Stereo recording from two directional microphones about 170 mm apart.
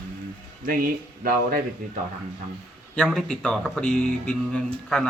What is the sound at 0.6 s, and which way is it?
Speech, 55° right (ahead or behind).